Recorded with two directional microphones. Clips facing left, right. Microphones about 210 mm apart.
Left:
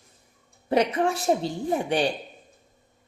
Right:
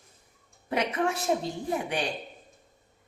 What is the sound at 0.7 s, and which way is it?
Speech, 30° left (ahead or behind).